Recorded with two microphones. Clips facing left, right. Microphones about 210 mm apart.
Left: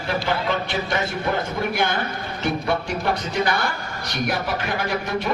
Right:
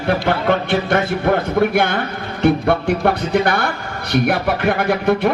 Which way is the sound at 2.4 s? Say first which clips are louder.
Right 9 dB; 55° right (ahead or behind).